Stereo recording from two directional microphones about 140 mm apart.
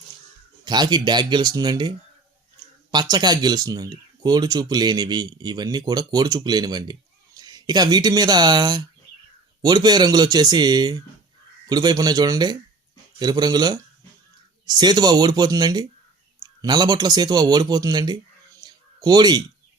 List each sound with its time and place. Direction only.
0.6 s speech: 30° right (ahead or behind)
2.9 s speech: 30° right (ahead or behind)
18.6 s a sound: 30° right (ahead or behind)